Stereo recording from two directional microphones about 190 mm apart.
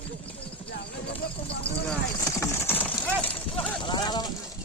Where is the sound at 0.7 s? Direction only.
60° left (ahead or behind).